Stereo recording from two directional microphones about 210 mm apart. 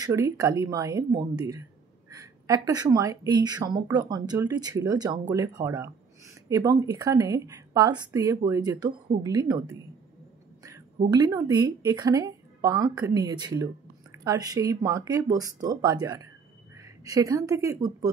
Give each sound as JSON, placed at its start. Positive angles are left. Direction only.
{"t": 0.0, "sound": "a woman's voice", "side_deg": -15}
{"t": 11.1, "sound": "a woman's voice", "side_deg": -15}